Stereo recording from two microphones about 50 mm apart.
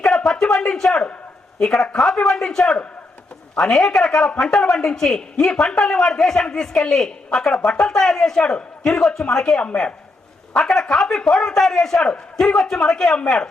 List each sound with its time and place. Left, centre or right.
0.3 s a man's voice: centre
4.3 s a man's voice: centre
10.5 s a man's voice: centre